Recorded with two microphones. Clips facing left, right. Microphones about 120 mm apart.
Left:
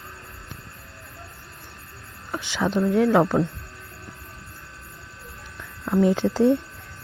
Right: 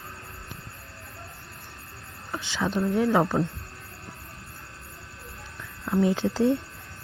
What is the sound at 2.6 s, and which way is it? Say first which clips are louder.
Speech: left 4 dB; 35° left (ahead or behind).